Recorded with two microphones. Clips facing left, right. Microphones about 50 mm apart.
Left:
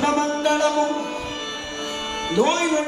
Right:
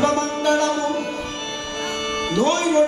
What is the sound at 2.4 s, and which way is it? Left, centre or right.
Music, left.